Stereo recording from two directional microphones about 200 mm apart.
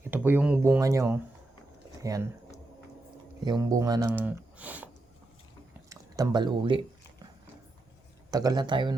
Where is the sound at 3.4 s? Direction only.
20° right (ahead or behind).